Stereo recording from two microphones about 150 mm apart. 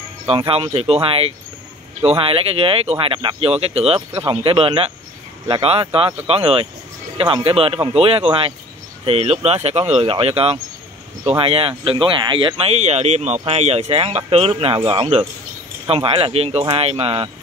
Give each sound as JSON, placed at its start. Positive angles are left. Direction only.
{"t": 0.3, "sound": "speech", "side_deg": -40}